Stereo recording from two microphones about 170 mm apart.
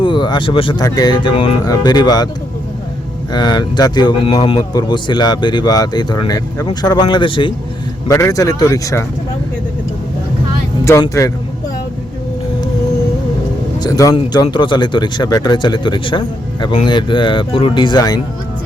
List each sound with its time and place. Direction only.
0.0 s speech: 25° left (ahead or behind)
3.3 s speech: 25° left (ahead or behind)
8.0 s speech: 20° left (ahead or behind)
13.7 s speech: 20° left (ahead or behind)